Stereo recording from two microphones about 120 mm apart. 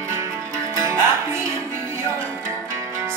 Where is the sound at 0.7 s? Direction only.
25° right (ahead or behind).